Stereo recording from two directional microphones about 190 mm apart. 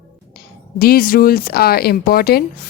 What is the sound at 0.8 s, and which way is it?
Speech, 50° left (ahead or behind).